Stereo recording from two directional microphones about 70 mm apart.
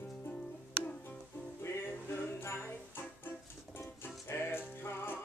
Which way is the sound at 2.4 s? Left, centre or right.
Left.